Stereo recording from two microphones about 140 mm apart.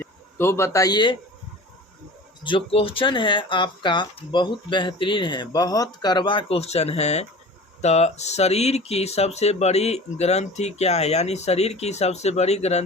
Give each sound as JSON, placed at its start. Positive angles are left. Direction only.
{"t": 0.0, "sound": "a man's voice", "side_deg": 15}
{"t": 2.4, "sound": "speech", "side_deg": 40}